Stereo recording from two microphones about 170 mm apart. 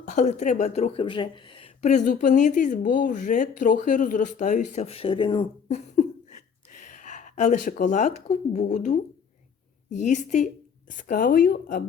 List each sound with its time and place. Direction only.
0.0 s speech: 45° left (ahead or behind)
1.8 s speech: 45° left (ahead or behind); by 5.5 s 30° left (ahead or behind)
5.6 s a sound: 45° left (ahead or behind)
9.9 s speech: 45° left (ahead or behind)